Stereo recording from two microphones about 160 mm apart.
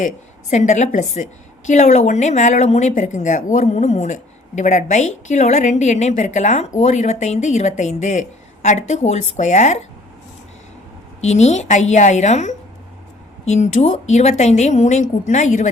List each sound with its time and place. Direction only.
0.5 s speech: 50° left (ahead or behind)
11.2 s speech: 45° left (ahead or behind)